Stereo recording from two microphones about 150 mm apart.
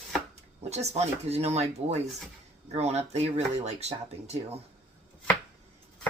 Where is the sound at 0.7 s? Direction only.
45° right (ahead or behind).